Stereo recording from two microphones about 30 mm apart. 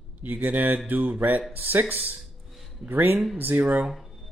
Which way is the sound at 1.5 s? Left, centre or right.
Right.